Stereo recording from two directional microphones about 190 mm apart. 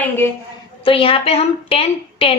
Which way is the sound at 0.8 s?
30° left (ahead or behind).